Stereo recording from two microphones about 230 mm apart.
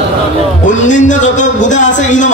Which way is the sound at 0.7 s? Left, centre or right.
Left.